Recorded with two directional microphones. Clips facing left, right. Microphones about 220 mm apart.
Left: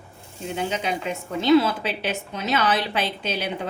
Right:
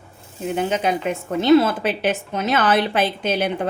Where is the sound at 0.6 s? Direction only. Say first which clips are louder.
Right 5 dB; 50° right (ahead or behind).